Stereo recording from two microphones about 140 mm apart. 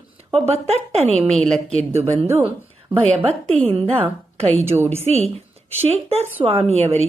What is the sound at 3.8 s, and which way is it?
Speech, 40° right (ahead or behind).